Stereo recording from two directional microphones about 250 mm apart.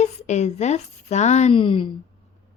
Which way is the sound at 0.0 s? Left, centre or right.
Left.